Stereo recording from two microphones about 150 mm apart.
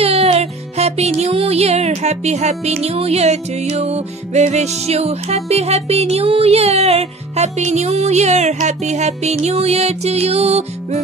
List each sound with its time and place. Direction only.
0.0 s music: 40° right (ahead or behind)